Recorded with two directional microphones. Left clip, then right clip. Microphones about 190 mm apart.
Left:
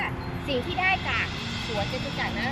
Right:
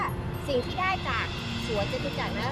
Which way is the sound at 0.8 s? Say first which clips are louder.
Left 3 dB; 10° right (ahead or behind).